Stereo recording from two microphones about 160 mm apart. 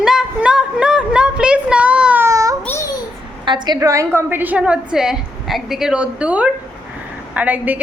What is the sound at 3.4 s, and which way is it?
A woman's voice, 30° right (ahead or behind).